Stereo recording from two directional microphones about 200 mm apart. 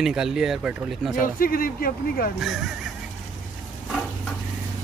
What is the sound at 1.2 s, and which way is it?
Speech, 45° left (ahead or behind).